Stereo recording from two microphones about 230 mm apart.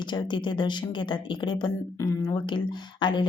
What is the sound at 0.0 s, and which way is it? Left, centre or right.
Speech, centre.